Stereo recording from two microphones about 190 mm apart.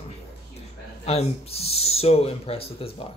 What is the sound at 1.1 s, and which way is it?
Speech, 35° left (ahead or behind).